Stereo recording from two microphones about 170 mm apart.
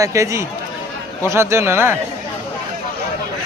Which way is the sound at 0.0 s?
20° right (ahead or behind).